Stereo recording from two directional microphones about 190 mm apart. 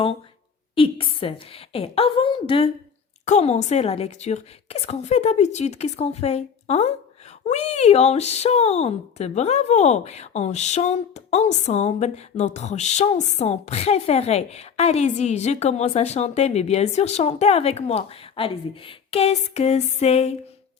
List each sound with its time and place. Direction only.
0.8 s a woman's voice: 30° left (ahead or behind)